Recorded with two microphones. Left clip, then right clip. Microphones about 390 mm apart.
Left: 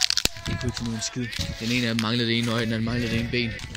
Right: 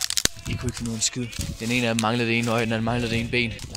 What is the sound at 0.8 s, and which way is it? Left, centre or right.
Speech, centre.